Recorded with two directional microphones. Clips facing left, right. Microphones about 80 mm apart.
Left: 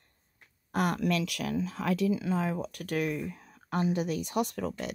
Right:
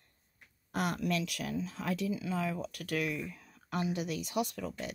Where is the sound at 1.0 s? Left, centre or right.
Left.